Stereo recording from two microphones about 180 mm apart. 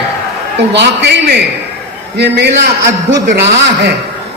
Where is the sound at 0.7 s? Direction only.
75° right (ahead or behind).